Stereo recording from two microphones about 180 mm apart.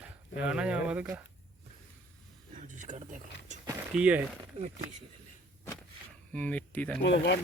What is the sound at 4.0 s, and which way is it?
Speech, 5° right (ahead or behind).